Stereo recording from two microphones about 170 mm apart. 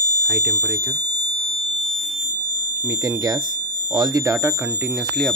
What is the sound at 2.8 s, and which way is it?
Speech, 20° right (ahead or behind).